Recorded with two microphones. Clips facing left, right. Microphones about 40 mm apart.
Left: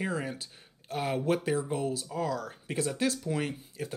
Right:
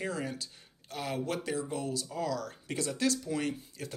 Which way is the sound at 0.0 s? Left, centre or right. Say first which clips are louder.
Left 2 dB; centre.